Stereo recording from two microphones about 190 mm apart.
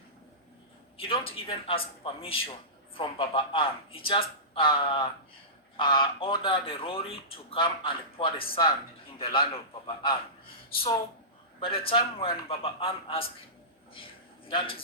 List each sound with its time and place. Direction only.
0.9 s speech: 30° left (ahead or behind)
11.6 s speech: 30° left (ahead or behind)
13.9 s a sound: 25° left (ahead or behind)